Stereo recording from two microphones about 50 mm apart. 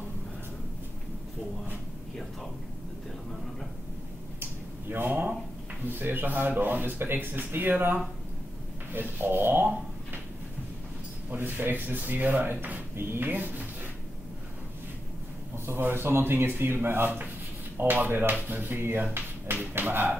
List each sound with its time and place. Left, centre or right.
4.4 s a sound: right
5.9 s speech: right
11.2 s speech: right
12.9 s speech: right
15.5 s speech: right
17.8 s speech: right